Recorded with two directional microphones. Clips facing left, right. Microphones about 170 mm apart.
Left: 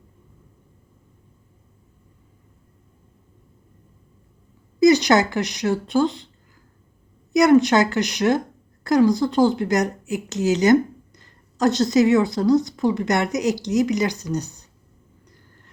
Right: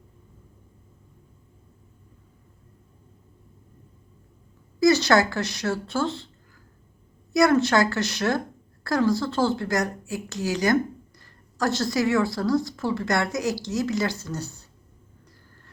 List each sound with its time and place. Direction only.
4.8 s speech: 15° left (ahead or behind)
7.3 s speech: 20° left (ahead or behind)